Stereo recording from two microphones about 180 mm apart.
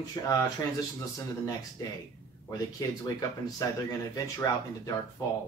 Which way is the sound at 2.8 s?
20° left (ahead or behind).